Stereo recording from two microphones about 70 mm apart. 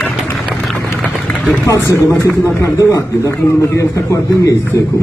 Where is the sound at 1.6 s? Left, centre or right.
Left.